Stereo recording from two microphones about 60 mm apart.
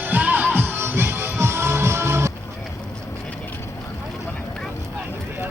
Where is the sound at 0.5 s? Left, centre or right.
Right.